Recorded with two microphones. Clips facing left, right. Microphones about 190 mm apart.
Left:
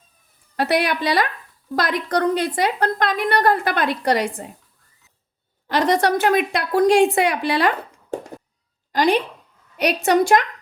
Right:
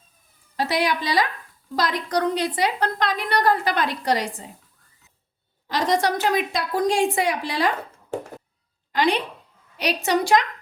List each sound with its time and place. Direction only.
0.5 s a woman's voice: 60° left (ahead or behind)
5.6 s a woman's voice: 60° left (ahead or behind)
8.9 s a sound: 40° left (ahead or behind)
9.7 s a woman's voice: 55° left (ahead or behind)